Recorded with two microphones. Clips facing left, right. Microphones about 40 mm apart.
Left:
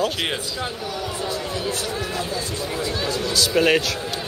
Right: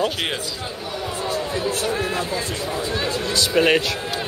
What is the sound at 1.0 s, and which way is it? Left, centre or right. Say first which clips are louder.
Speech: right 4 dB; right.